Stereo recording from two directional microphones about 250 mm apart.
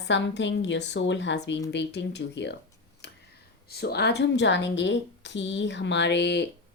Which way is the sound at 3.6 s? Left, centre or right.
Left.